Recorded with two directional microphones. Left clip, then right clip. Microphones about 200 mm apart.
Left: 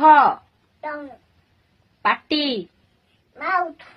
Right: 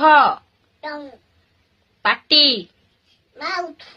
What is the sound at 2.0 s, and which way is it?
Speech, 20° right (ahead or behind).